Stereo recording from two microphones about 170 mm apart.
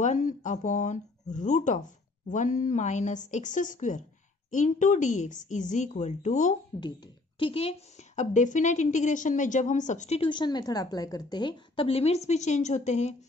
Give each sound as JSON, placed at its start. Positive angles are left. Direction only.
{"t": 0.0, "sound": "speech", "side_deg": 45}
{"t": 6.7, "sound": "a woman's voice", "side_deg": 25}
{"t": 8.2, "sound": "a woman's voice", "side_deg": 45}